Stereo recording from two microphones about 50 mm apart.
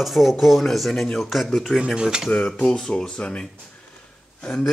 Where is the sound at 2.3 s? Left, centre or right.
Left.